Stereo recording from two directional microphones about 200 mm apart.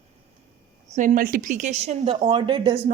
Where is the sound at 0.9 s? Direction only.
40° right (ahead or behind).